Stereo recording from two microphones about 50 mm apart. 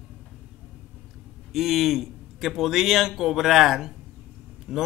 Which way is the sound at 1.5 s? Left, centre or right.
Centre.